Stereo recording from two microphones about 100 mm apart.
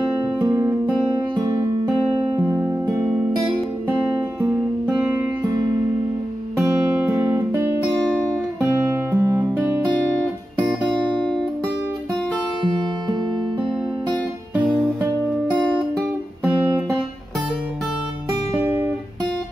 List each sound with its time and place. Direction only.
7.3 s music: 25° right (ahead or behind)
8.1 s guitar: 15° right (ahead or behind)
9.2 s music: 30° right (ahead or behind)
11.0 s music: 10° left (ahead or behind)
14.5 s music: 15° right (ahead or behind)
18.6 s guitar: 20° right (ahead or behind)